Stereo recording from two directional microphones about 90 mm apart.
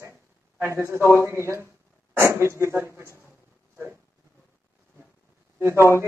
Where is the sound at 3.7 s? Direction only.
20° right (ahead or behind).